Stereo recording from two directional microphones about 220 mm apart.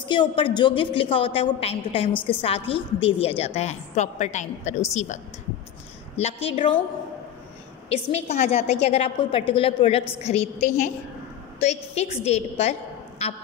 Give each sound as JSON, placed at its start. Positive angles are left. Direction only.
{"t": 0.0, "sound": "a woman's voice", "side_deg": 20}
{"t": 7.9, "sound": "a woman's voice", "side_deg": 30}